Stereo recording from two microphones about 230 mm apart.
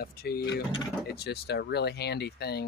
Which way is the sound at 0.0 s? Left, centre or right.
Left.